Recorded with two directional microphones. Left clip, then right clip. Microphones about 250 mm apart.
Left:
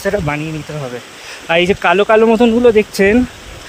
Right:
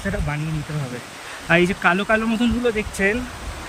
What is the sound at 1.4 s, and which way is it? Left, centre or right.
Speech, centre.